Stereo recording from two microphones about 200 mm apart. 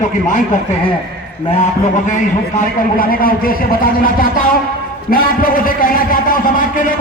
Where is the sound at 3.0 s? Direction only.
45° left (ahead or behind).